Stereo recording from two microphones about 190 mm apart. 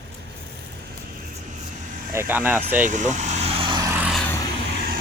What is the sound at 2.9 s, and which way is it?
Vehicle, 40° right (ahead or behind).